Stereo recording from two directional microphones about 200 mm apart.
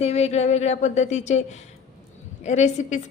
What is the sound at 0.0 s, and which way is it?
Speech, 30° left (ahead or behind).